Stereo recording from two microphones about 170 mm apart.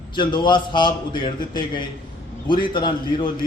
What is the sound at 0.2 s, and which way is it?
A man's voice, 25° left (ahead or behind).